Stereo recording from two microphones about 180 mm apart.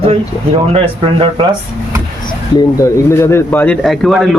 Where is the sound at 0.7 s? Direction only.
30° right (ahead or behind).